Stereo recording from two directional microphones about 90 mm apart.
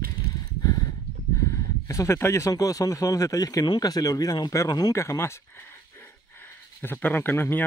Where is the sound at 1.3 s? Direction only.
35° left (ahead or behind).